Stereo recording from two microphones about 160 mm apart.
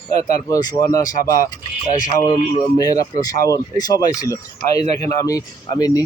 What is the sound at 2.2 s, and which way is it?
Speech, 25° left (ahead or behind).